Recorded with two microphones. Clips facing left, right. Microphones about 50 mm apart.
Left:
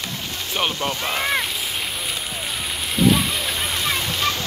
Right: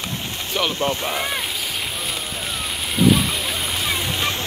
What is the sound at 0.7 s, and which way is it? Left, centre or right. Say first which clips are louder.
Speech: right 2 dB; right.